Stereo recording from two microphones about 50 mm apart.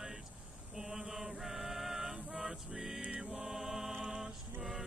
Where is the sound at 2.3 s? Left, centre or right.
Centre.